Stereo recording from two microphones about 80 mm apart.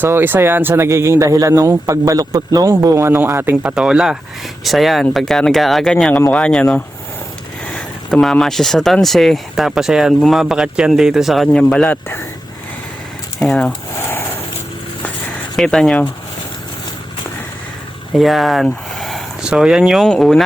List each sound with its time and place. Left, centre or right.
0.0 s a man's voice: right
3.5 s speech: centre
6.3 s speech: centre
11.9 s speech: left
13.4 s speech: centre
13.9 s speech: left
15.5 s speech: centre
18.1 s speech: centre
19.4 s speech: centre
20.1 s speech: centre